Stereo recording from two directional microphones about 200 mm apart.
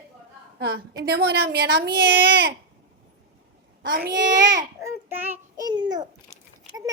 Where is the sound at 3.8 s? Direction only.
50° right (ahead or behind).